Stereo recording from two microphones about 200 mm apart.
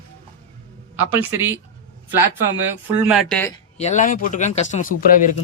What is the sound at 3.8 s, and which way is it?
Speech, 35° left (ahead or behind).